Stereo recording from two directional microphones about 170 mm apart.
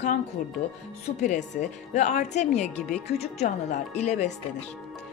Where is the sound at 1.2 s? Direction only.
45° left (ahead or behind).